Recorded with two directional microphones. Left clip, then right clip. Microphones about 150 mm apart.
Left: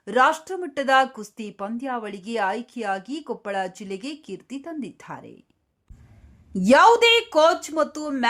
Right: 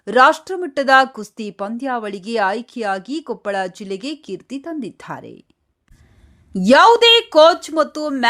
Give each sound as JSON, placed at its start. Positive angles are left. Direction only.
{"t": 0.0, "sound": "speech", "side_deg": -35}
{"t": 6.5, "sound": "a woman's voice", "side_deg": -25}